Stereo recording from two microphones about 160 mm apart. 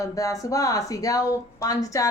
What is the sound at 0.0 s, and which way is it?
A woman's voice, 20° left (ahead or behind).